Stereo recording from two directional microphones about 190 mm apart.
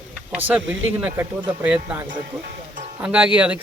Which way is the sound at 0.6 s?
90° right.